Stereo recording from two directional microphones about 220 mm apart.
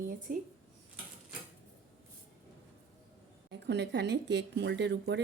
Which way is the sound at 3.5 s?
50° right (ahead or behind).